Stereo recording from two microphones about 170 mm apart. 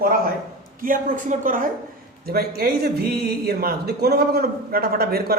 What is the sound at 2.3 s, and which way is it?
Speech, 65° right (ahead or behind).